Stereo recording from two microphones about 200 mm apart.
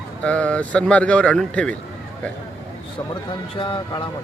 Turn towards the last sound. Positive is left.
turn(degrees=25)  # may be behind; listen again after turning